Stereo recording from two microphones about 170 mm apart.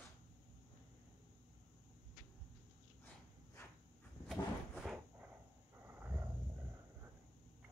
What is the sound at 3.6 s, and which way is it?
Insect, 15° left (ahead or behind).